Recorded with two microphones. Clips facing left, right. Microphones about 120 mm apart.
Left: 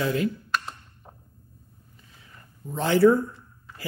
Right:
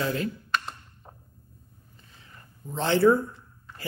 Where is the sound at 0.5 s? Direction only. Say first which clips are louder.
Right 4 dB; centre (ahead or behind).